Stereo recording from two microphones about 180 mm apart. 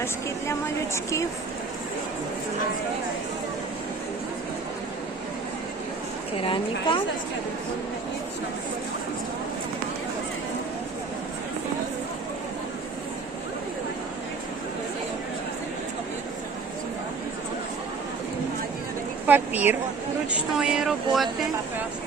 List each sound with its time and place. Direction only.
0.9 s speech: 15° left (ahead or behind)
6.3 s a woman's voice: 30° left (ahead or behind)
19.3 s a sound: 10° right (ahead or behind)
20.5 s speech: 5° right (ahead or behind)